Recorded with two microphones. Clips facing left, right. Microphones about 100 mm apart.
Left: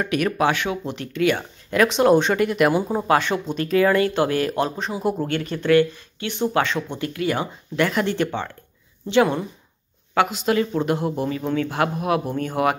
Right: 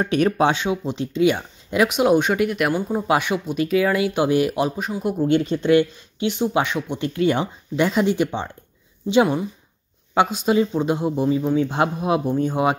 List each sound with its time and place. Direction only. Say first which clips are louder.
0.0 s speech: right 2 dB; 30° right (ahead or behind); by 3.0 s centre (ahead or behind)
3.1 s a man's voice: left 1 dB; 10° right (ahead or behind)